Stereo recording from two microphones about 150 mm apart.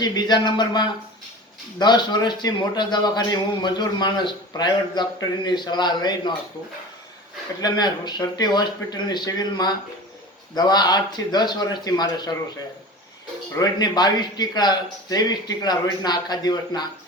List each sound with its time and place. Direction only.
0.0 s a man's voice: 30° left (ahead or behind)
7.6 s a man's voice: 30° left (ahead or behind)
13.5 s a man's voice: 25° left (ahead or behind)